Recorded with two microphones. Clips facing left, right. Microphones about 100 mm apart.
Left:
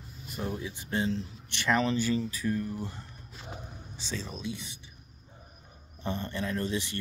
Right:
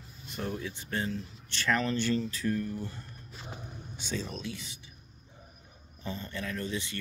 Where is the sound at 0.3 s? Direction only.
10° left (ahead or behind).